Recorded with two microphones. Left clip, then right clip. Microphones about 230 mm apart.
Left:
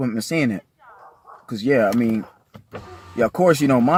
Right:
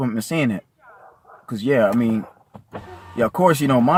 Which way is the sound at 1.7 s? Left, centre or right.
Right.